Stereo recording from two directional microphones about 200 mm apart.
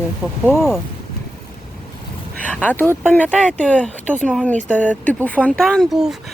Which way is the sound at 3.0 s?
5° left (ahead or behind).